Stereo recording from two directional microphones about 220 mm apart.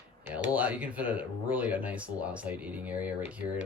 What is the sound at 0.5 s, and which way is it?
Speech, 5° right (ahead or behind).